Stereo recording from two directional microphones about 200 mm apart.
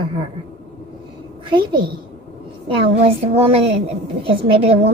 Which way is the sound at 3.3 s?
30° right (ahead or behind).